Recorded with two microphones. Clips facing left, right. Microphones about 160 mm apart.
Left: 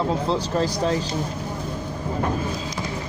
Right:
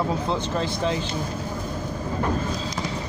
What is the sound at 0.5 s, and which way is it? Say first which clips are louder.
Speech: left 3 dB; 40° left (ahead or behind).